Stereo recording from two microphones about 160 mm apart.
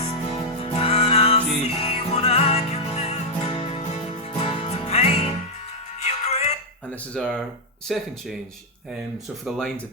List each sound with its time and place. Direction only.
0.0 s music: 40° left (ahead or behind)
7.1 s speech: 5° left (ahead or behind)
9.4 s speech: centre (ahead or behind)